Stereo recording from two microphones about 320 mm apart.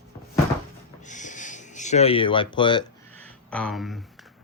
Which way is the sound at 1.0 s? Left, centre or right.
Left.